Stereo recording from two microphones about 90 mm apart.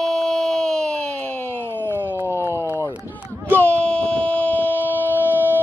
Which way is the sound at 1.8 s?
25° right (ahead or behind).